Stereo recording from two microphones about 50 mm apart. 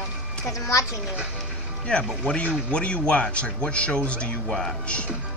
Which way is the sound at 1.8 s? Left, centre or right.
Left.